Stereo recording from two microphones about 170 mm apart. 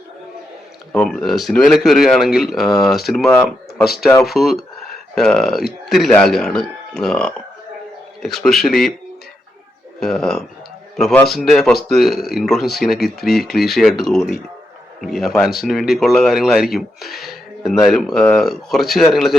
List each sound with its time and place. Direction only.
0.9 s speech: 5° left (ahead or behind)
10.0 s speech: 5° left (ahead or behind)